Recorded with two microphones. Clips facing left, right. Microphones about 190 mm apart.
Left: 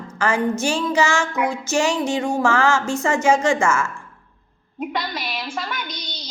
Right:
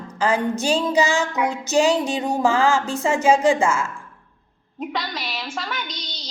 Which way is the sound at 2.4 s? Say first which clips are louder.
Right 2 dB; 15° right (ahead or behind).